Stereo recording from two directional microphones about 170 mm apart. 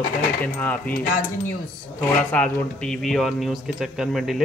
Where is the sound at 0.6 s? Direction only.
10° left (ahead or behind).